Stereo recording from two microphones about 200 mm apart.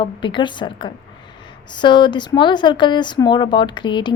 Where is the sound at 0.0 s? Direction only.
25° left (ahead or behind).